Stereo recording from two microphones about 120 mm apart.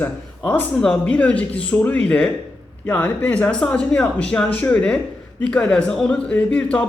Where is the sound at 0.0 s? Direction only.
15° left (ahead or behind).